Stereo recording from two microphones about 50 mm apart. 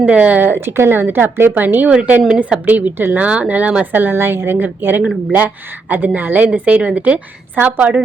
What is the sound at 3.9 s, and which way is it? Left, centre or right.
A woman's voice, right.